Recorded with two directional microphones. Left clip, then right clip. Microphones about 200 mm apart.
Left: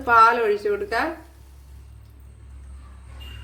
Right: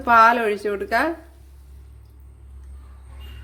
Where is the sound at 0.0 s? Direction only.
45° right (ahead or behind).